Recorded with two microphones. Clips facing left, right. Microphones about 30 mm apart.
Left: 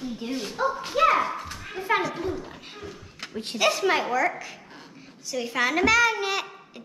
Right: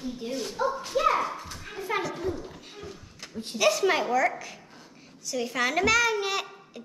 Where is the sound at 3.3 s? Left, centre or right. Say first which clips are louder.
Left 3 dB; left.